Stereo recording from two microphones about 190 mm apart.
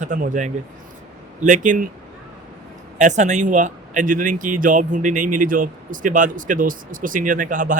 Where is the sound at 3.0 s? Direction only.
40° right (ahead or behind).